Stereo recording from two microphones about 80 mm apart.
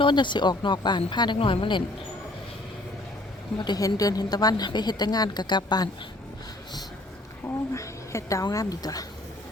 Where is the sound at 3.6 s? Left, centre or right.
Left.